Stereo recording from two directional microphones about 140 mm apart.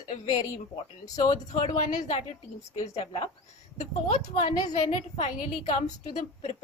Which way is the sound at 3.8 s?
55° left (ahead or behind).